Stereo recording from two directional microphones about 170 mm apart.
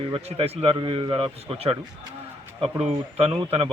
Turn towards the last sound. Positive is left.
turn(degrees=-30)  # may be behind; listen again after turning